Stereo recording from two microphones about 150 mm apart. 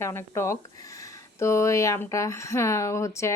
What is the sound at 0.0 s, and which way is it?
Speech, 15° left (ahead or behind).